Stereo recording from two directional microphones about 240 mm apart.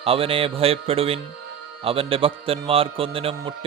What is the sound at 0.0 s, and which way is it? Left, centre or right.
Speech, right.